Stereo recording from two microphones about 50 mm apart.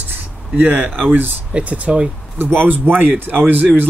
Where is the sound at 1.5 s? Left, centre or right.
Right.